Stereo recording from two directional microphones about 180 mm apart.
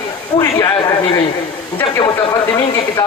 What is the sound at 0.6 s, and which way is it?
A man's voice, 20° left (ahead or behind).